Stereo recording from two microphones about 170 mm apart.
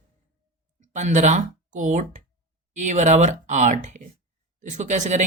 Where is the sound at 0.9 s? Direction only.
45° right (ahead or behind).